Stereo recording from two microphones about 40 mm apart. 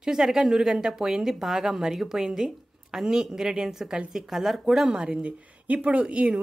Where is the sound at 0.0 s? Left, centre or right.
Centre.